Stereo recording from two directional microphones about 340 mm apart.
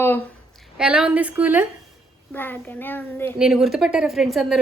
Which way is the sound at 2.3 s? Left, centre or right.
Centre.